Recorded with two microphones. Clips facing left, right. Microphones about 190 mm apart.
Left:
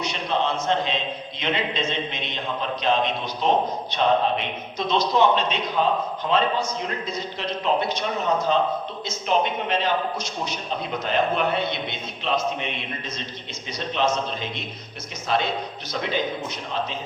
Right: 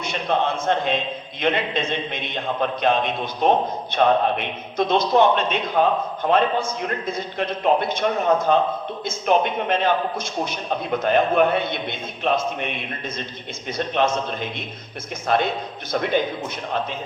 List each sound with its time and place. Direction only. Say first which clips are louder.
0.0 s a man's voice: right 2 dB; 55° right (ahead or behind)